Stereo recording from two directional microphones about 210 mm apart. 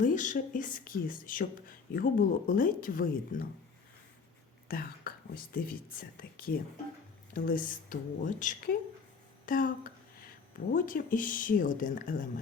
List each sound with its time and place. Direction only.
0.0 s speech: 35° left (ahead or behind)
4.7 s speech: 45° left (ahead or behind)